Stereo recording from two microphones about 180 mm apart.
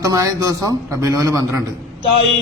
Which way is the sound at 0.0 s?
20° right (ahead or behind).